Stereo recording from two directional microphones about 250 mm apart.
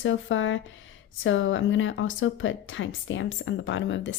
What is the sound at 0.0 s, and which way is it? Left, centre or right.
Speech, left.